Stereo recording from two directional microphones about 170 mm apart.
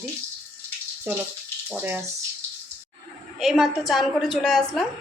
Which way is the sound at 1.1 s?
15° right (ahead or behind).